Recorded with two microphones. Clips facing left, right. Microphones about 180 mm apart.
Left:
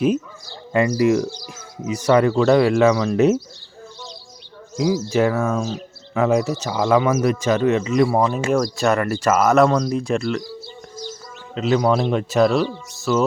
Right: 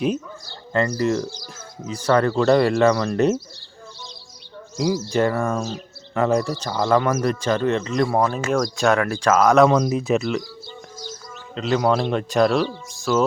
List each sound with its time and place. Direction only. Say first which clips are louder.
0.7 s speech: left 4 dB; 10° left (ahead or behind)
4.8 s speech: left 2 dB; centre (ahead or behind)
9.6 s speech: right 1 dB; 10° right (ahead or behind)
11.5 s speech: left 2 dB; centre (ahead or behind)